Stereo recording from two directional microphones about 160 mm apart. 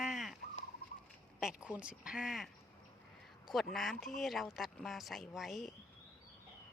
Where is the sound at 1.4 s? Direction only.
5° right (ahead or behind).